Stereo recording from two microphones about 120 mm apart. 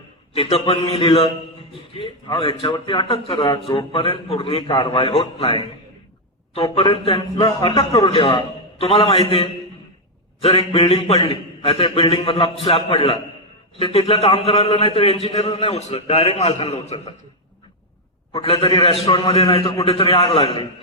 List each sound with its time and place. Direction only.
0.3 s speech: 55° left (ahead or behind)
2.4 s speech: 45° left (ahead or behind)
10.8 s a man's voice: 50° left (ahead or behind)
16.9 s speech: 45° left (ahead or behind)
18.3 s speech: 50° left (ahead or behind)